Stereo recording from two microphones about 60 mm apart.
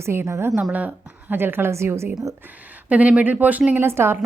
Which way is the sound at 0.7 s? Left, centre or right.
Right.